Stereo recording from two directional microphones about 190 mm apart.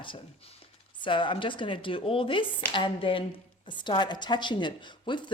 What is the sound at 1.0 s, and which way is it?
A woman's voice, 25° left (ahead or behind).